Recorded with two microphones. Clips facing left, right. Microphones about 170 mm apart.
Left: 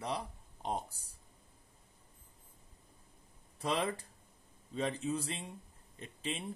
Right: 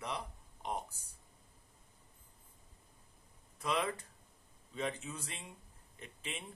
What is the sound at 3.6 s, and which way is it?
Speech, 30° left (ahead or behind).